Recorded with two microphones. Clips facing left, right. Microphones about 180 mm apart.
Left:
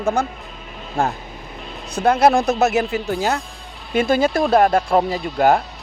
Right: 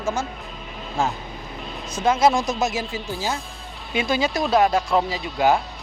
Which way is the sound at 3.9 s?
50° left (ahead or behind).